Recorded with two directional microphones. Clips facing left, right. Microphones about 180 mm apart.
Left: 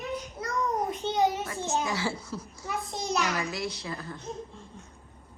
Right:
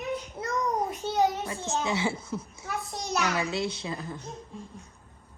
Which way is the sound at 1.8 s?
20° right (ahead or behind).